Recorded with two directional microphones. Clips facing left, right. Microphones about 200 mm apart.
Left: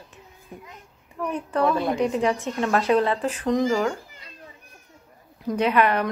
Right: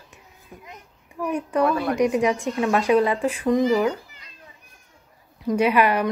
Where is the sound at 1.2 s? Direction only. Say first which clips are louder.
Right 2 dB; 10° right (ahead or behind).